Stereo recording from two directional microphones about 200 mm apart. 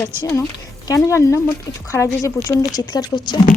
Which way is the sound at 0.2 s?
15° left (ahead or behind).